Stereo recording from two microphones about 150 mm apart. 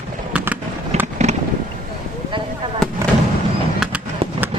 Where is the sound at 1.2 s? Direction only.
45° right (ahead or behind).